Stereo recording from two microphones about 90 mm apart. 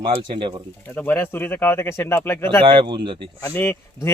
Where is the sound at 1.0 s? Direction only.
25° left (ahead or behind).